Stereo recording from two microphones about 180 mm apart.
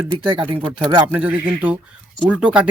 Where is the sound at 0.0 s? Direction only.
30° right (ahead or behind).